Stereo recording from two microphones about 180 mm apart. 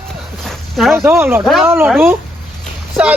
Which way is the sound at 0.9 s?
15° right (ahead or behind).